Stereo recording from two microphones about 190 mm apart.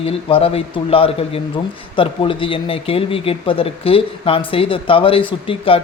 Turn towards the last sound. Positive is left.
turn(degrees=30)  # may be behind; listen again after turning